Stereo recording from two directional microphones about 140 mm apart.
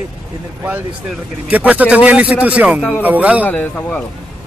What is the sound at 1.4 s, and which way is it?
Speech, 10° right (ahead or behind).